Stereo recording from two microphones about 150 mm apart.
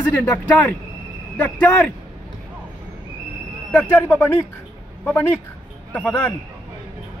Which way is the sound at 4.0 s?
10° left (ahead or behind).